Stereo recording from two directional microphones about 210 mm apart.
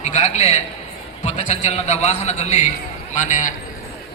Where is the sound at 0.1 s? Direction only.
30° left (ahead or behind).